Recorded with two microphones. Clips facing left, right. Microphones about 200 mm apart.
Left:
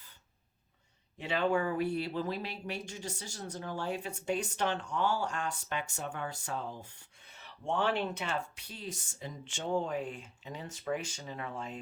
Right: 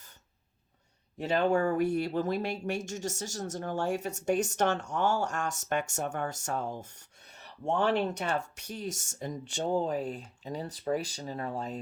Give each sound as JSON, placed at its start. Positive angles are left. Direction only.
{"t": 1.2, "sound": "speech", "side_deg": -40}